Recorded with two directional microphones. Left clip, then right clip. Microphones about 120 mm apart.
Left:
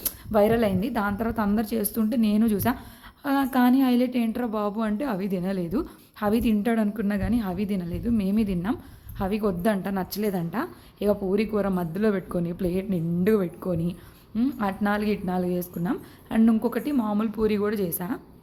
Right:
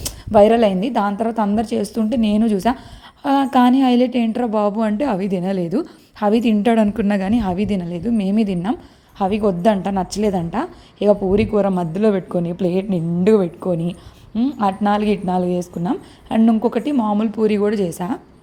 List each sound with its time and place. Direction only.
0.0 s a woman's voice: 25° right (ahead or behind)
3.2 s a woman's voice: 25° right (ahead or behind)